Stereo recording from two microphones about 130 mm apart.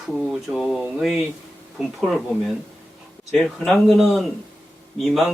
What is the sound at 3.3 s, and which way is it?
Speech, centre (ahead or behind).